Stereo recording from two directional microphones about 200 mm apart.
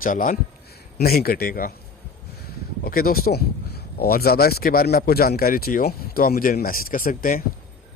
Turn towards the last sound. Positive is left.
turn(degrees=45)  # may be behind; listen again after turning